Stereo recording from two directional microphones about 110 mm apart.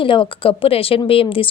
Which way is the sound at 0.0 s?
50° left (ahead or behind).